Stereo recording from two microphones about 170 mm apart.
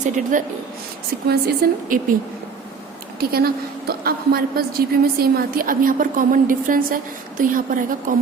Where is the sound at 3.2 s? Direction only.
65° right (ahead or behind).